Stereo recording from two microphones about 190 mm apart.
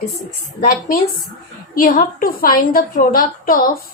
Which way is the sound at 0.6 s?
45° left (ahead or behind).